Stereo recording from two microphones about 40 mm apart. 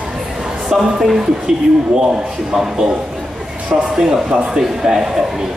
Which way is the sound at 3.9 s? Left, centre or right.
Centre.